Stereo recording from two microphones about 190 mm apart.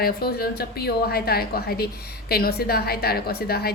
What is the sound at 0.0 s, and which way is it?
A woman's voice, 55° left (ahead or behind).